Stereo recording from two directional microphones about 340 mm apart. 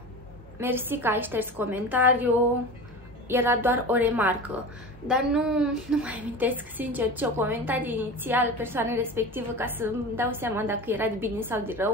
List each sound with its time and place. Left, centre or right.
0.6 s a woman's voice: centre
3.3 s a woman's voice: centre